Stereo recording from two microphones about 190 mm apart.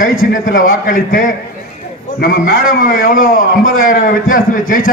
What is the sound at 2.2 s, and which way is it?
A man's voice, 50° left (ahead or behind).